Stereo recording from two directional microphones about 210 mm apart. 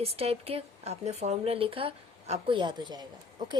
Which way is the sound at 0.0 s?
30° right (ahead or behind).